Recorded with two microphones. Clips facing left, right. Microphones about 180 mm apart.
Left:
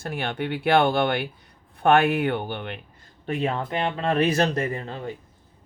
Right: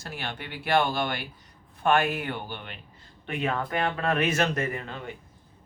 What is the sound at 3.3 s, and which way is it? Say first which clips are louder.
Speech: left 3 dB; 30° left (ahead or behind).